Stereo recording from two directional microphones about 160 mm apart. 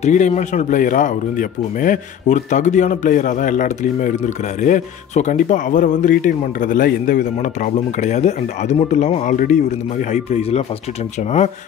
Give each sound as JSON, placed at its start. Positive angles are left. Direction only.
{"t": 0.0, "sound": "speech", "side_deg": 45}
{"t": 7.7, "sound": "speech", "side_deg": 45}